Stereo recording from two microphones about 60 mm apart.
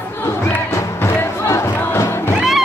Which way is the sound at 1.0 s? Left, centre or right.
Left.